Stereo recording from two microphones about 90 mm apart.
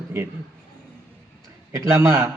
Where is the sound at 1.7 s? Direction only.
35° right (ahead or behind).